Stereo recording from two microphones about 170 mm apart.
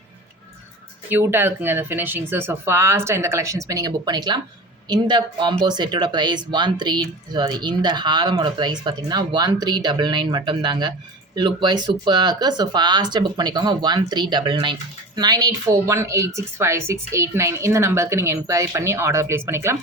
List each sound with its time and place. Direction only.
1.1 s speech: 15° right (ahead or behind)